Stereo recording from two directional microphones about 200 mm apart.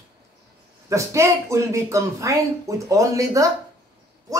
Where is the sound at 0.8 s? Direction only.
15° right (ahead or behind).